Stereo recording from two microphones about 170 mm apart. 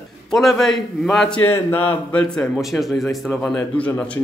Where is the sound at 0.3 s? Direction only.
Centre (ahead or behind).